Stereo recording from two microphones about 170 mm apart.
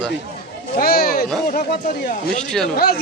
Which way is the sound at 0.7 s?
60° left (ahead or behind).